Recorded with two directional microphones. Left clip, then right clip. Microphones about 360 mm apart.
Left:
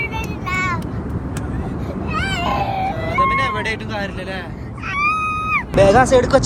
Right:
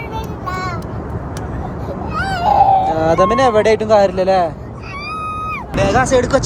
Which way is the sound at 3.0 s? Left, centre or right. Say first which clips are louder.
Right 5 dB; right.